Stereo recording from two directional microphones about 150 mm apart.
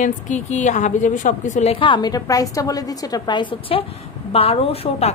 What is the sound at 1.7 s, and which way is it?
A woman's voice, 35° left (ahead or behind).